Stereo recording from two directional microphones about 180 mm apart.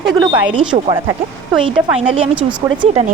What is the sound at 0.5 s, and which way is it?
A woman's voice, 25° right (ahead or behind).